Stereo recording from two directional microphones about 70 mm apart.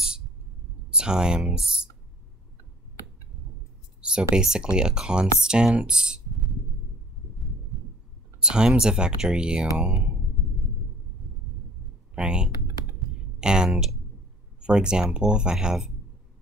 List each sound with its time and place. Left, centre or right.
0.8 s speech: centre
4.0 s speech: centre
8.4 s speech: centre
12.2 s speech: centre